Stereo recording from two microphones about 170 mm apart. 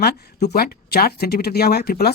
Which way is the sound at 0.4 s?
70° left (ahead or behind).